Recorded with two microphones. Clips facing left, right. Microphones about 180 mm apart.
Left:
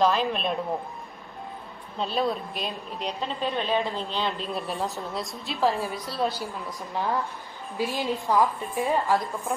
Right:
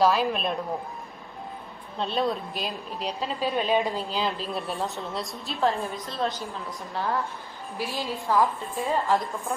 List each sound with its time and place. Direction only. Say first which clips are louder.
0.0 s a woman's voice: right 1 dB; 5° right (ahead or behind)
2.0 s a woman's voice: even; centre (ahead or behind); by 8.8 s 15° left (ahead or behind)